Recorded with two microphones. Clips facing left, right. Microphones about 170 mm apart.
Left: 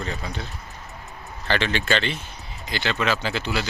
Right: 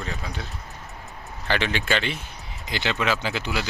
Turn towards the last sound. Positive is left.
turn(degrees=-15)  # may be behind; listen again after turning